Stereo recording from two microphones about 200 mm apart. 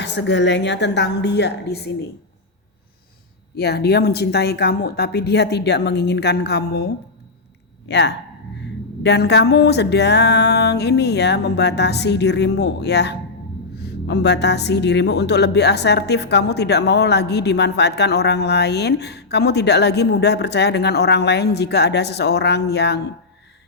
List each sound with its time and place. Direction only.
0.0 s a woman's voice: 60° left (ahead or behind)
3.5 s a woman's voice: 55° left (ahead or behind)